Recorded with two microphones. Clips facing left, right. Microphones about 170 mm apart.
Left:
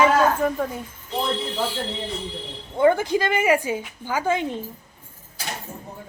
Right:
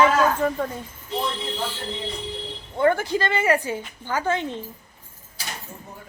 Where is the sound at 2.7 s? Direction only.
15° left (ahead or behind).